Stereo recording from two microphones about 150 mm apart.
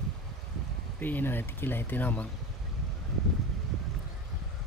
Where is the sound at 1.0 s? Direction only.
15° left (ahead or behind).